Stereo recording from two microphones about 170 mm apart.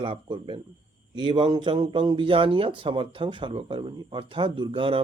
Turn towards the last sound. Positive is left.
turn(degrees=-30)  # may be behind; listen again after turning